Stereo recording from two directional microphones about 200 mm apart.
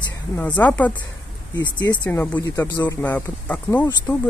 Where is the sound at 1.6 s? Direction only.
20° left (ahead or behind).